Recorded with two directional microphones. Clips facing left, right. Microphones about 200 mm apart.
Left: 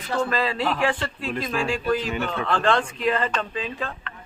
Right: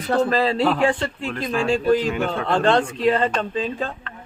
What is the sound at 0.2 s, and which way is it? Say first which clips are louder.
Speech: right 4 dB; 40° right (ahead or behind).